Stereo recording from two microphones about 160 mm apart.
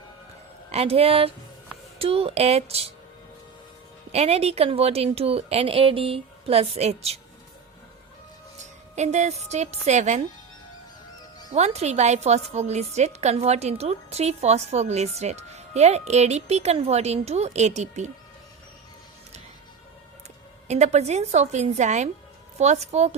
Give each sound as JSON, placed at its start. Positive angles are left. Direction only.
{"t": 0.7, "sound": "speech", "side_deg": -40}
{"t": 4.1, "sound": "speech", "side_deg": -40}
{"t": 9.0, "sound": "a woman's voice", "side_deg": -45}
{"t": 11.5, "sound": "a woman's voice", "side_deg": -40}
{"t": 20.7, "sound": "a woman's voice", "side_deg": -45}